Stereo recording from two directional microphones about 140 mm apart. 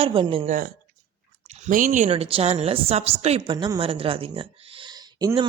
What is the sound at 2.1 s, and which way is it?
Speech, 45° right (ahead or behind).